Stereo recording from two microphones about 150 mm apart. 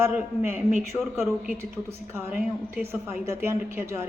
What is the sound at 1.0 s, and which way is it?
Speech, centre (ahead or behind).